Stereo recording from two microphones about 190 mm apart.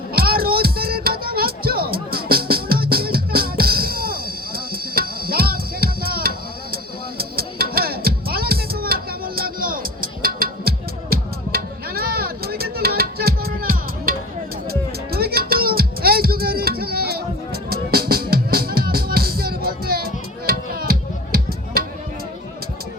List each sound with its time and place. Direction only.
0.1 s music: 50° right (ahead or behind)